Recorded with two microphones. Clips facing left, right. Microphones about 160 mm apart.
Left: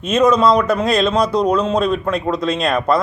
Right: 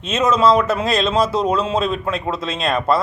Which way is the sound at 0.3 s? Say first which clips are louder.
Left 1 dB; 5° right (ahead or behind).